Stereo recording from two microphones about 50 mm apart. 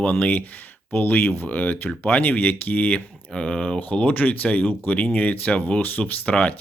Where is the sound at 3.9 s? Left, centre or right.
Left.